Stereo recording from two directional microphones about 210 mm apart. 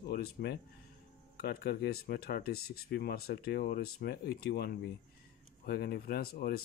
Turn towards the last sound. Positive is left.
turn(degrees=45)  # may be behind; listen again after turning